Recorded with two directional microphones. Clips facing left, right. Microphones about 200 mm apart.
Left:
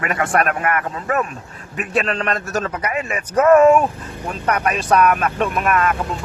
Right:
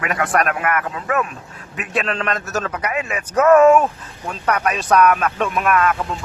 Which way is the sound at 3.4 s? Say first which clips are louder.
Even; 10° left (ahead or behind).